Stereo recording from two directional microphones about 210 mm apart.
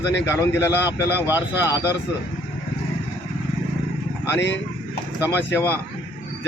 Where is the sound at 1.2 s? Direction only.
10° right (ahead or behind).